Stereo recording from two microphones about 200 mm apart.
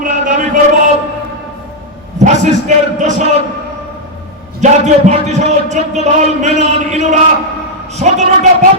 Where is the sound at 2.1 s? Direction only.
35° right (ahead or behind).